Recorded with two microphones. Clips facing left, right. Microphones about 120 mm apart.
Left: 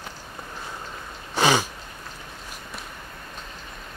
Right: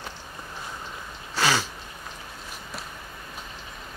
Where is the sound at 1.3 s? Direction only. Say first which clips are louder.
Left 4 dB; 20° left (ahead or behind).